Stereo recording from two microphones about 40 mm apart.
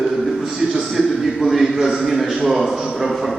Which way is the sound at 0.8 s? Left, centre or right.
Centre.